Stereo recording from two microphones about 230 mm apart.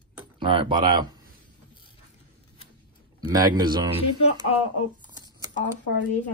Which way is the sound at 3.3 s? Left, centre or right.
Centre.